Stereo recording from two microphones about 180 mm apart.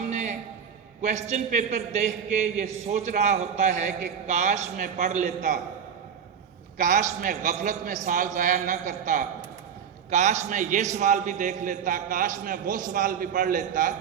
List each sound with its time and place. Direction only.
0.1 s a sound: 40° right (ahead or behind)
1.0 s a man's voice: 40° right (ahead or behind)
6.7 s a man's voice: 45° right (ahead or behind)